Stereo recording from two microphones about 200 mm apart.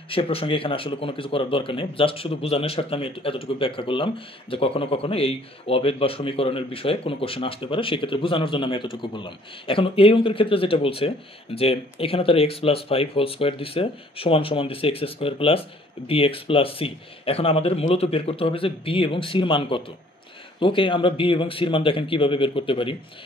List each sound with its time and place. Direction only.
0.1 s speech: 30° left (ahead or behind)